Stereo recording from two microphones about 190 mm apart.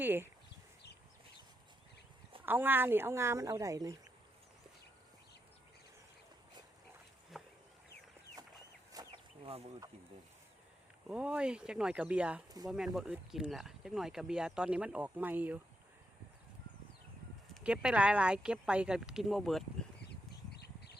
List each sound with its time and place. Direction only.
0.0 s speech: 10° right (ahead or behind)
2.4 s speech: 10° right (ahead or behind)
7.3 s a sound: centre (ahead or behind)
8.9 s chicken: 20° right (ahead or behind)
11.1 s speech: 5° right (ahead or behind)
12.5 s speech: 20° right (ahead or behind)
12.7 s speech: centre (ahead or behind)
17.5 s speech: 5° right (ahead or behind)
20.1 s bird: 60° left (ahead or behind)